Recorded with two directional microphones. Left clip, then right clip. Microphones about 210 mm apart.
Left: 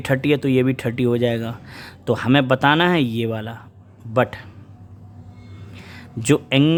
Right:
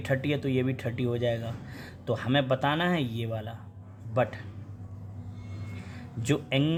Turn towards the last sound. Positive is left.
turn(degrees=40)  # may be behind; listen again after turning